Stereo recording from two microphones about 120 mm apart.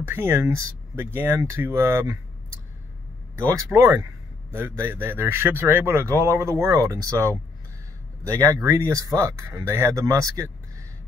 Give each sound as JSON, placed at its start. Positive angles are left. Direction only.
{"t": 0.0, "sound": "a man's voice", "side_deg": -20}